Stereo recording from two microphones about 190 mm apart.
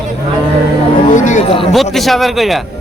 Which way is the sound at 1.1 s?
40° left (ahead or behind).